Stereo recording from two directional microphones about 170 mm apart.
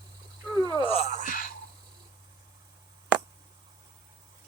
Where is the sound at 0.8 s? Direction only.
35° left (ahead or behind); by 1.5 s 50° left (ahead or behind).